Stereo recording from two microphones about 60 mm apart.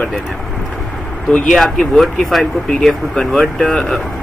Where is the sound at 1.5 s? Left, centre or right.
Centre.